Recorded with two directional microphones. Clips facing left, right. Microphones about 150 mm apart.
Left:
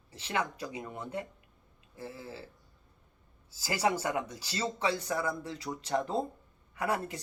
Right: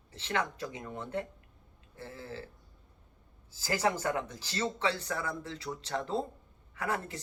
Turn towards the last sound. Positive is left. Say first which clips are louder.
# left 2 dB
turn(degrees=15)  # may be behind; listen again after turning